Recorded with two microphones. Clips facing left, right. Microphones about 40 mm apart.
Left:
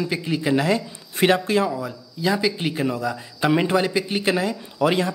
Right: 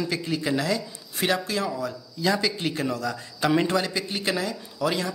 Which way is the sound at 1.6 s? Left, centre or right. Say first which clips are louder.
Left 2 dB; centre.